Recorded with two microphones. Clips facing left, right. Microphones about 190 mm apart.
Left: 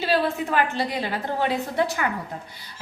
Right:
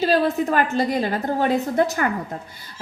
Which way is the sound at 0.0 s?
40° right (ahead or behind).